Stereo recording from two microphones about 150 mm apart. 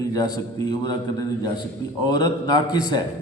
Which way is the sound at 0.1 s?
25° left (ahead or behind).